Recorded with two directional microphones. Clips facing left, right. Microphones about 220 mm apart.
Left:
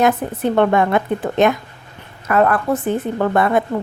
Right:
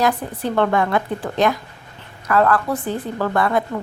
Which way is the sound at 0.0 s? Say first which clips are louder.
Left 4 dB; 20° left (ahead or behind).